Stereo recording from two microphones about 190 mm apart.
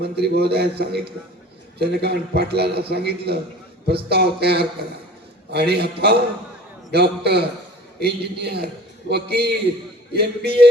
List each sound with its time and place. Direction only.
0.0 s a man's voice: 60° right (ahead or behind)